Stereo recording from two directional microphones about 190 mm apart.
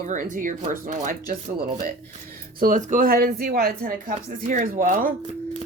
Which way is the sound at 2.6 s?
45° right (ahead or behind).